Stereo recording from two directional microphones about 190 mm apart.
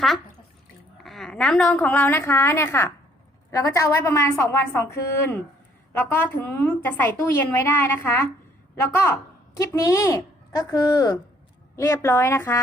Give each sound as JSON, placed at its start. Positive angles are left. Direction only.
{"t": 1.0, "sound": "a woman's voice", "side_deg": 0}